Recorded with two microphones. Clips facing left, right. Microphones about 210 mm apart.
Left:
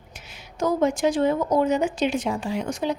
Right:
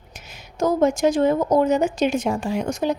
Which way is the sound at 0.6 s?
45° right (ahead or behind).